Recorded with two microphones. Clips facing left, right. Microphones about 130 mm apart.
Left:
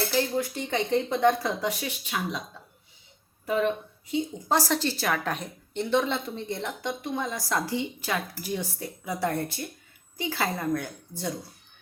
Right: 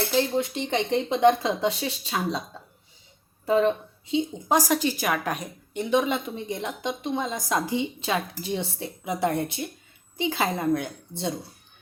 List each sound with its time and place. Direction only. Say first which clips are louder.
0.1 s a woman's voice: right 3 dB; 20° right (ahead or behind)
3.4 s a woman's voice: right 4 dB; 30° right (ahead or behind)